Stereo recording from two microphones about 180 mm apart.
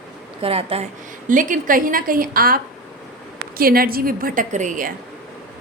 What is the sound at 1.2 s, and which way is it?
A woman's voice, 45° right (ahead or behind).